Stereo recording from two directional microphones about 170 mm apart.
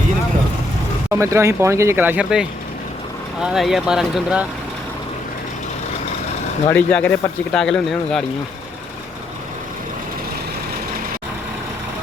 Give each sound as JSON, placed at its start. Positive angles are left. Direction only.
{"t": 1.1, "sound": "speech", "side_deg": -15}
{"t": 6.7, "sound": "speech", "side_deg": 10}